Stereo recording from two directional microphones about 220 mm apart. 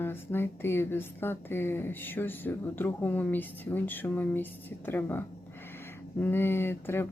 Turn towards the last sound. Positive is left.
turn(degrees=10)  # may be behind; listen again after turning